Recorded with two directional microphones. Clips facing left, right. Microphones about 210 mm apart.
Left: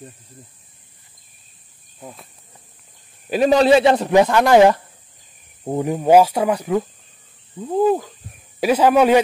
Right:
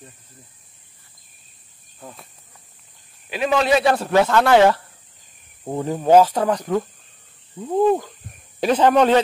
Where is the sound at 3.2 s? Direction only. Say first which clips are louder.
Left 6 dB; 40° left (ahead or behind).